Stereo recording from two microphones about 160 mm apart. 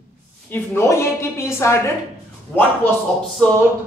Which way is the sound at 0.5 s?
15° left (ahead or behind).